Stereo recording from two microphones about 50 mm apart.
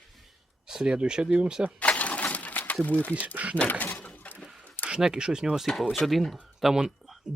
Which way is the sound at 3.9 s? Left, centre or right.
Left.